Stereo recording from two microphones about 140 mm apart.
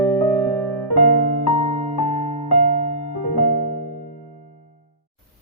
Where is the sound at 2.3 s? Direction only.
65° right (ahead or behind).